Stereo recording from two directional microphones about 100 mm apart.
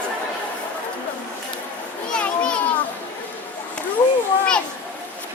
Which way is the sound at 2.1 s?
10° left (ahead or behind).